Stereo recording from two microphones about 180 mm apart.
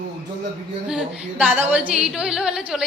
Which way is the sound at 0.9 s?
5° right (ahead or behind).